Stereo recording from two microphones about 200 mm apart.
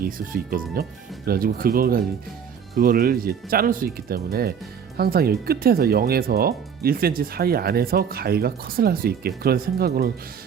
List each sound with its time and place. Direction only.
0.0 s speech: 45° right (ahead or behind)